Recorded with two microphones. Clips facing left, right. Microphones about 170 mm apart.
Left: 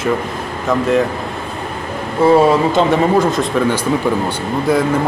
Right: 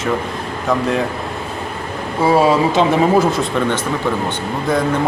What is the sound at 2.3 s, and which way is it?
Speech, centre (ahead or behind).